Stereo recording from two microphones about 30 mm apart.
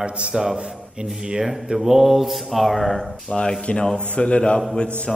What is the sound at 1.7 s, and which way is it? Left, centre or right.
A man's voice, centre.